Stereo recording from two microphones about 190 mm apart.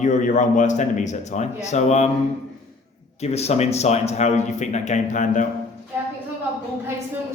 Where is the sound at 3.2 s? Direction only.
35° left (ahead or behind).